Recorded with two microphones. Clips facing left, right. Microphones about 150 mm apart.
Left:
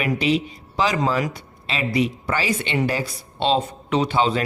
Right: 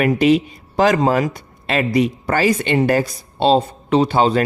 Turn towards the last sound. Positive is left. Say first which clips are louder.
# right 5 dB
turn(degrees=-40)  # may be behind; listen again after turning